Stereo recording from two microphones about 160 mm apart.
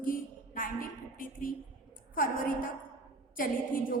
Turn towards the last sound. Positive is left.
turn(degrees=60)  # may be behind; listen again after turning